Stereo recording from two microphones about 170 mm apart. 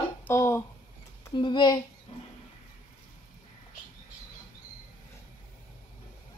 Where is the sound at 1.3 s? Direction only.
30° left (ahead or behind).